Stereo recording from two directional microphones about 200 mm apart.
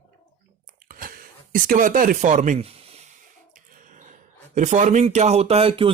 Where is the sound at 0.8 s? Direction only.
45° right (ahead or behind).